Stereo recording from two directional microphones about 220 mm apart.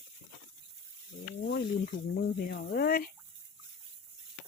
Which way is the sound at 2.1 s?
45° left (ahead or behind).